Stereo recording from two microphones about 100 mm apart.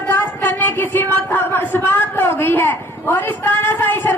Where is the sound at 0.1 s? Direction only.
20° left (ahead or behind).